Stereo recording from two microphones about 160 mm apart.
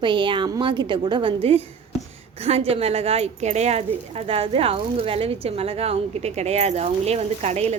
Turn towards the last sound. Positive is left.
turn(degrees=-45)  # may be behind; listen again after turning